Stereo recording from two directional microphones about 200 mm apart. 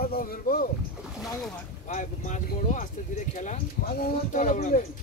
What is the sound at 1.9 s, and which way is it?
Speech, 40° left (ahead or behind).